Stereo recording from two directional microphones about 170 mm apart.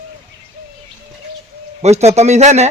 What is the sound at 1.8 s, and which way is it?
Speech, 40° right (ahead or behind).